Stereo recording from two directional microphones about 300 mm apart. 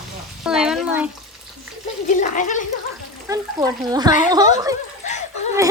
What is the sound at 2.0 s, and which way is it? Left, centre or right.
Speech, left.